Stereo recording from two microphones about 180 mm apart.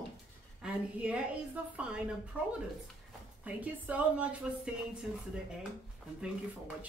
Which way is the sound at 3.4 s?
10° right (ahead or behind).